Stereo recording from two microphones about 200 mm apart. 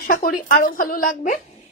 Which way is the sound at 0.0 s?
45° left (ahead or behind).